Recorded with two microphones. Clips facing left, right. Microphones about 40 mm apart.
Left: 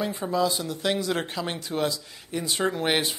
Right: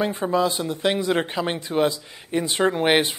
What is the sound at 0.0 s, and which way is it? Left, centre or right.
Speech, right.